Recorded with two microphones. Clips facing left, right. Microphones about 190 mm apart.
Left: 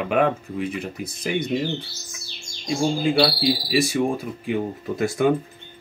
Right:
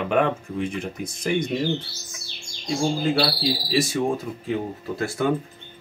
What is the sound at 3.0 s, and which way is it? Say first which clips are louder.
Speech: left 3 dB; 10° left (ahead or behind).